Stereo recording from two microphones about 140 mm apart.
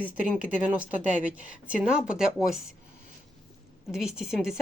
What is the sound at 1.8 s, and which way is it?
Speech, 5° right (ahead or behind).